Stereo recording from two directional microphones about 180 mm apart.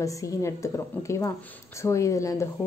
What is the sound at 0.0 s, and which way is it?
A woman's voice, 15° left (ahead or behind).